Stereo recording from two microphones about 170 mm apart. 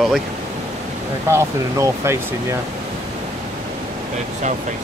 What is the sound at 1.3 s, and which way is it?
Speech, 15° right (ahead or behind).